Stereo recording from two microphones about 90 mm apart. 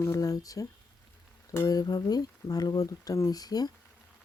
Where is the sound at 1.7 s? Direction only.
45° left (ahead or behind).